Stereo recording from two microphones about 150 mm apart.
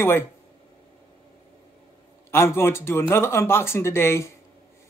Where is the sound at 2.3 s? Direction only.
15° left (ahead or behind).